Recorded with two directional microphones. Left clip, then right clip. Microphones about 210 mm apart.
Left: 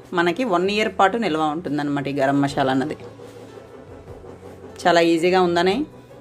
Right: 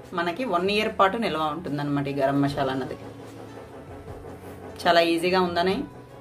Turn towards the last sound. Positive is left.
turn(degrees=35)  # may be behind; listen again after turning